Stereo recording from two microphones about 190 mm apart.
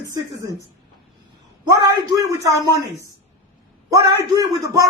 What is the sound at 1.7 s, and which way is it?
A man's voice, 15° right (ahead or behind).